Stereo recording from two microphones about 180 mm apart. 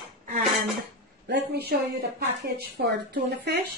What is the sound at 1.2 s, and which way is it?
Speech, 65° right (ahead or behind).